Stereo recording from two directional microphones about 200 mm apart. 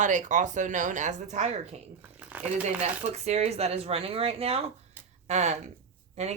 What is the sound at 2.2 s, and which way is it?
Speech, 10° right (ahead or behind).